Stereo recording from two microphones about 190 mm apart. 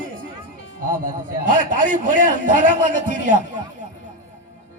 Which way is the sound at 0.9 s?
45° right (ahead or behind).